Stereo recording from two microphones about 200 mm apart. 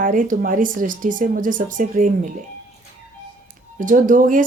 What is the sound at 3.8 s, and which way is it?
Speech, 40° right (ahead or behind).